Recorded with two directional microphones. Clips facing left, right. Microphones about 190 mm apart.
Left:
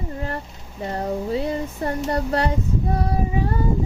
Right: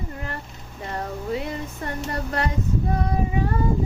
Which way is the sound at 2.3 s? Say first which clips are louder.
Left 2 dB; 30° left (ahead or behind).